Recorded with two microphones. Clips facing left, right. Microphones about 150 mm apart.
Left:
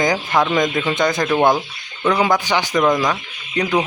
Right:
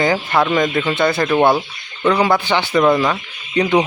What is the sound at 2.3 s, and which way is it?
Speech, 15° left (ahead or behind).